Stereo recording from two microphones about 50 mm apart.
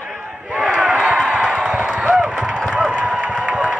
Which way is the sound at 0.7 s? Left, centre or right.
Right.